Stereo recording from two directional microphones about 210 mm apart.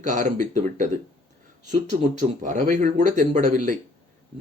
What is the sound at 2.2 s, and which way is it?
Speech, 35° right (ahead or behind).